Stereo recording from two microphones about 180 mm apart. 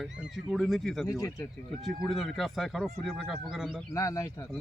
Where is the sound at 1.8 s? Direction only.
Centre (ahead or behind).